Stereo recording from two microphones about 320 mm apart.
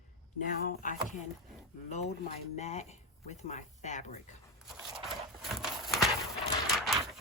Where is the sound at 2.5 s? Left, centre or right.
Left.